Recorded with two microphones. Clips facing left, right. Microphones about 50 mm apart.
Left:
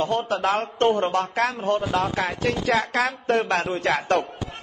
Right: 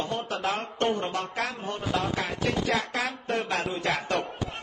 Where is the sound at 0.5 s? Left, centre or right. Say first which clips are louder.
Left 6 dB; left.